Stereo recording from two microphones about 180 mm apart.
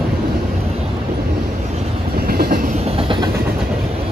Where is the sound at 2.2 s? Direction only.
60° right (ahead or behind).